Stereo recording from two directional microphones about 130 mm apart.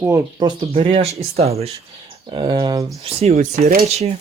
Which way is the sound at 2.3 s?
35° right (ahead or behind).